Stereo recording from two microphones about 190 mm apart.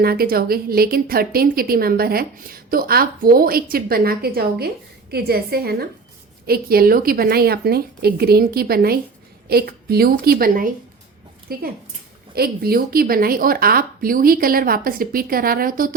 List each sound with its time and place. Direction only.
0.0 s a woman's voice: 55° right (ahead or behind)